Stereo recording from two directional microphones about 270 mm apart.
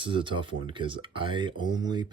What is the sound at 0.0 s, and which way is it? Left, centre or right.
Speech, centre.